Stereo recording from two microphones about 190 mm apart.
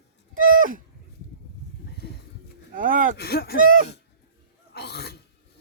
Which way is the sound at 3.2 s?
55° left (ahead or behind).